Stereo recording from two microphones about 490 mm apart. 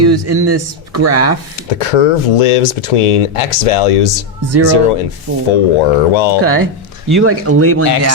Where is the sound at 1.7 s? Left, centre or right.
Left.